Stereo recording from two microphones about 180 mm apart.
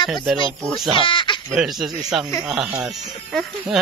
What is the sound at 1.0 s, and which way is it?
Speech, 25° left (ahead or behind).